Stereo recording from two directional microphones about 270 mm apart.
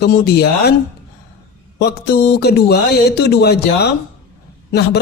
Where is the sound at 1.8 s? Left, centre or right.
Left.